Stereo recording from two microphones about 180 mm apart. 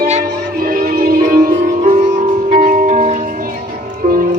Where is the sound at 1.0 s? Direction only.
55° right (ahead or behind).